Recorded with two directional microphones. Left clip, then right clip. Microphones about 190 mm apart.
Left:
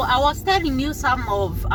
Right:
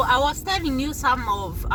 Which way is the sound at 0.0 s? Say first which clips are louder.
Left 1 dB; 25° right (ahead or behind).